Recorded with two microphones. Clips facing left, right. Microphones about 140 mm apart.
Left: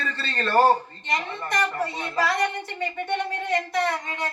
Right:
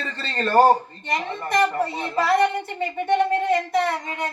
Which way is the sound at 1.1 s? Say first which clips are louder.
Right 3 dB; 30° right (ahead or behind).